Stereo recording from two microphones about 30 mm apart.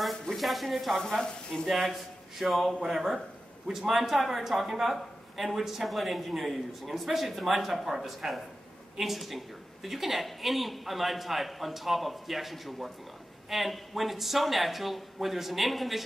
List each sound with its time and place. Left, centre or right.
0.4 s a man's voice: centre
0.9 s speech: centre
1.7 s a man's voice: centre